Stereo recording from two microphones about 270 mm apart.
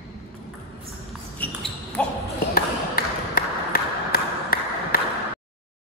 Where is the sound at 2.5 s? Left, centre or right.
Left.